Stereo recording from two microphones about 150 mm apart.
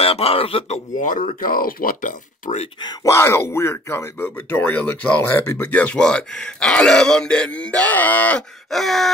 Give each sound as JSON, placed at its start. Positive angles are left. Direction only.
{"t": 0.0, "sound": "a man's voice", "side_deg": 40}
{"t": 0.9, "sound": "speech", "side_deg": 60}
{"t": 2.8, "sound": "speech", "side_deg": 20}